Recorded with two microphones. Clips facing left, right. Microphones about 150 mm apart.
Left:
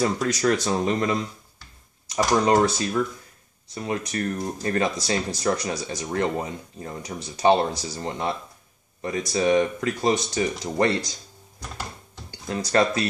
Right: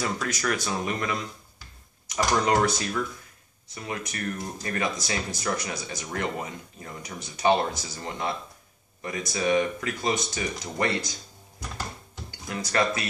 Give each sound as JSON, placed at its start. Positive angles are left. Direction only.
{"t": 0.0, "sound": "speech", "side_deg": 25}
{"t": 2.3, "sound": "speech", "side_deg": 25}
{"t": 12.3, "sound": "speech", "side_deg": 35}